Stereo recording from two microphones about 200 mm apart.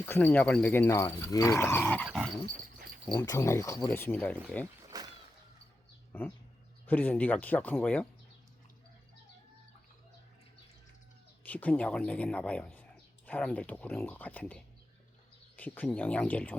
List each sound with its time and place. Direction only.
0.0 s speech: 10° left (ahead or behind)
2.0 s dog: centre (ahead or behind)
3.2 s speech: 15° left (ahead or behind)
4.6 s a sound: 20° right (ahead or behind)
6.1 s speech: 10° left (ahead or behind)
11.4 s speech: 5° left (ahead or behind)